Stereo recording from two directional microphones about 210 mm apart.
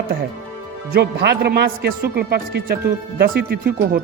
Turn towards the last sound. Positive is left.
turn(degrees=-45)  # may be behind; listen again after turning